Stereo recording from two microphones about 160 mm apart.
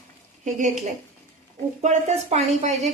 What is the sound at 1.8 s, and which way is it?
Speech, 45° right (ahead or behind).